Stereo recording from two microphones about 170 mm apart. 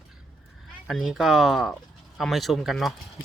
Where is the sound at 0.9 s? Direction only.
Centre (ahead or behind).